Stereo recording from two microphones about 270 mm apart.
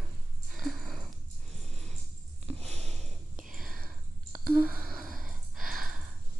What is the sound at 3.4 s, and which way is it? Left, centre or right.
Whispering, centre.